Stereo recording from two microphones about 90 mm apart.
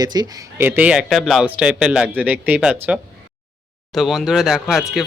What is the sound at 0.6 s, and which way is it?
Speech, 20° right (ahead or behind).